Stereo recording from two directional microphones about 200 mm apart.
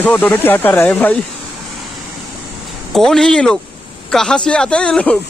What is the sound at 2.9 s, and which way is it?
Speech, centre (ahead or behind).